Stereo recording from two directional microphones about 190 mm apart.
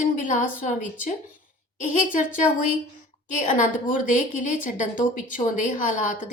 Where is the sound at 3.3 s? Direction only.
40° left (ahead or behind).